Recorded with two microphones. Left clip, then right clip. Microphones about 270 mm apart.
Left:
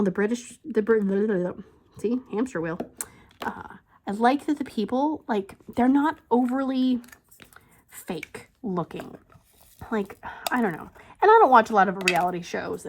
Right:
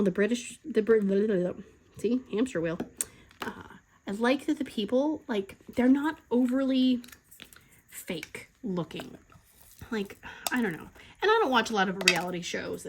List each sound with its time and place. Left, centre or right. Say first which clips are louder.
0.0 s speech: left 2 dB; centre
8.7 s speech: left 5 dB; centre
9.7 s dog: left 6 dB; centre
10.1 s speech: left 5 dB; centre
11.8 s speech: left 5 dB; centre
12.4 s speech: left 4 dB; centre